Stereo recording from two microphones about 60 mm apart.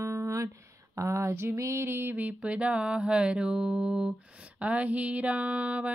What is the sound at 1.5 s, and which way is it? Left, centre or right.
Music, right.